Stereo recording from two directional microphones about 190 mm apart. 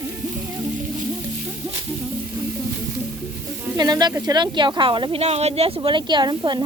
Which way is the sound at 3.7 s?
20° right (ahead or behind).